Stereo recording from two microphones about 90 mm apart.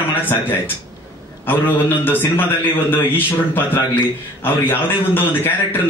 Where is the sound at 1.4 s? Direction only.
20° left (ahead or behind).